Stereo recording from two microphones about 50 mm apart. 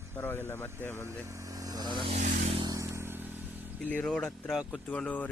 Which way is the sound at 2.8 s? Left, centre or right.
Right.